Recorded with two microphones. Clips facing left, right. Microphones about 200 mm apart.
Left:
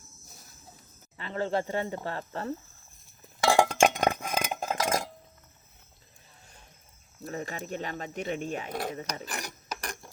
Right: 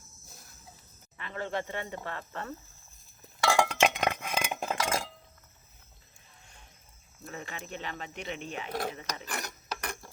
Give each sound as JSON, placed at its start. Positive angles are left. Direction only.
{"t": 1.1, "sound": "speech", "side_deg": 30}
{"t": 3.5, "sound": "chink", "side_deg": 45}
{"t": 7.3, "sound": "speech", "side_deg": 40}